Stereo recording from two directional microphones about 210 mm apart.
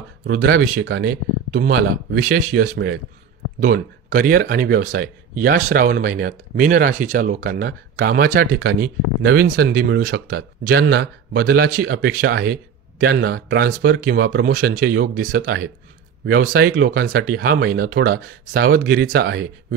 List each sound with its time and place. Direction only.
0.3 s a man's voice: 50° right (ahead or behind)
1.5 s a man's voice: 40° right (ahead or behind)
8.5 s a man's voice: 55° right (ahead or behind)
14.4 s a man's voice: 40° right (ahead or behind)